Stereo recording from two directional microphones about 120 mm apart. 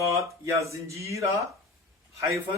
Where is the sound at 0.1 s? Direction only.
25° right (ahead or behind).